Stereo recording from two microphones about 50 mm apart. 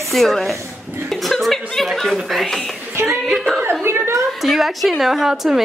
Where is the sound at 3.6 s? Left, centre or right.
Right.